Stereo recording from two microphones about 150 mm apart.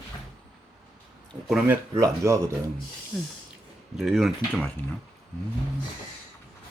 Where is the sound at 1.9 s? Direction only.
20° right (ahead or behind).